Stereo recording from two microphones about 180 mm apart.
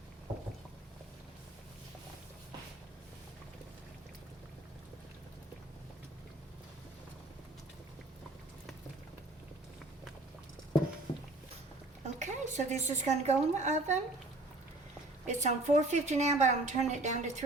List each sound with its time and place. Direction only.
11.1 s a sound: 25° left (ahead or behind)
12.2 s a woman's voice: 40° right (ahead or behind)
15.3 s a woman's voice: 40° right (ahead or behind)